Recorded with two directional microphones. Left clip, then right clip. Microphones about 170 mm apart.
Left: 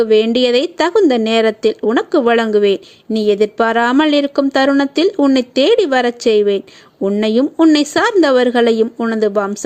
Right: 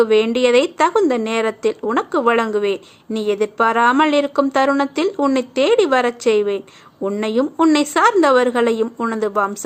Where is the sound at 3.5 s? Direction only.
40° left (ahead or behind).